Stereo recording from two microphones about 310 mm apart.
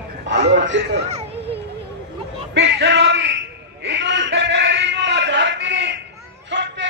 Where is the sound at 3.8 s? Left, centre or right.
Right.